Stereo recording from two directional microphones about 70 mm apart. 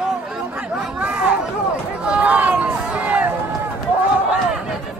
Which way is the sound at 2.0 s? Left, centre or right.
Centre.